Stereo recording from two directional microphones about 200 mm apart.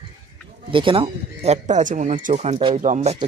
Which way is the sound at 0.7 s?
25° right (ahead or behind).